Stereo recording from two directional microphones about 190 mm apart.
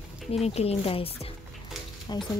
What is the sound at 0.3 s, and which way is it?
Speech, 35° left (ahead or behind).